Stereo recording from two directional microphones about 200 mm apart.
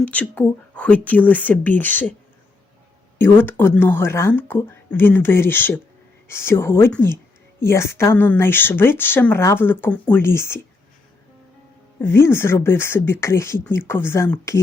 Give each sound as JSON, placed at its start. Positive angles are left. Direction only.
{"t": 0.0, "sound": "speech", "side_deg": 5}
{"t": 3.2, "sound": "speech", "side_deg": 10}
{"t": 11.9, "sound": "speech", "side_deg": 10}